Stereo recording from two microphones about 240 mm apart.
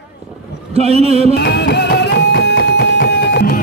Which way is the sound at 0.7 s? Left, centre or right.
Right.